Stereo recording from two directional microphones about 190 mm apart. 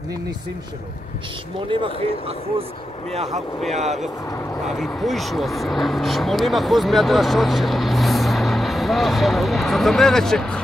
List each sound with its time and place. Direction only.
1.7 s speech: 25° right (ahead or behind)
4.6 s speech: centre (ahead or behind)